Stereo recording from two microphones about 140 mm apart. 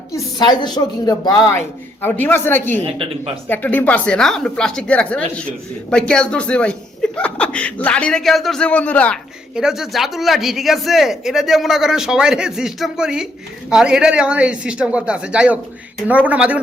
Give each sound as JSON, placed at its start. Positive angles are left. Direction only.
{"t": 0.1, "sound": "a woman's voice", "side_deg": 30}
{"t": 2.8, "sound": "speech", "side_deg": -40}
{"t": 3.5, "sound": "speech", "side_deg": 15}
{"t": 9.6, "sound": "speech", "side_deg": -5}